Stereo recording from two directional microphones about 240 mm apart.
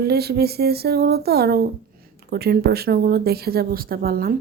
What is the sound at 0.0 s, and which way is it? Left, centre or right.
Speech, right.